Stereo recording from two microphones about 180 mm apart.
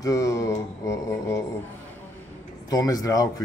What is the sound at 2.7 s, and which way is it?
Speech, 20° left (ahead or behind).